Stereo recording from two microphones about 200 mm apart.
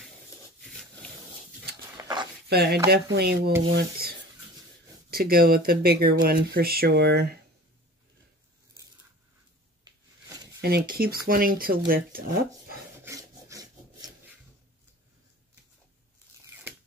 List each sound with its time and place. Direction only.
2.0 s a sound: 20° right (ahead or behind)
2.5 s speech: 55° right (ahead or behind)
5.1 s speech: 50° right (ahead or behind)
10.6 s speech: 50° right (ahead or behind)
13.0 s rub: 15° right (ahead or behind)